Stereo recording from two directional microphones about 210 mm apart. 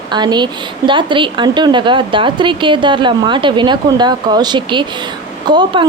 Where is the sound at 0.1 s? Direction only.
20° right (ahead or behind).